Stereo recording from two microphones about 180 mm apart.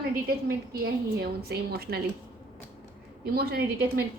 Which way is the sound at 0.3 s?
60° right (ahead or behind).